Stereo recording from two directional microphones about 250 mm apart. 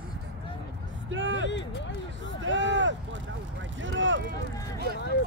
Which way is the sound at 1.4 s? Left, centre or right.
Left.